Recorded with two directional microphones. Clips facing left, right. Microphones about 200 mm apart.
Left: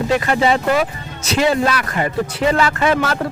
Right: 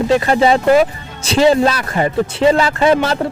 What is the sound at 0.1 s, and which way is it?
Speech, 30° right (ahead or behind).